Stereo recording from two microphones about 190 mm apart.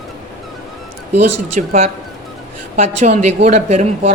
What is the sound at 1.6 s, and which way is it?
Speech, 40° right (ahead or behind).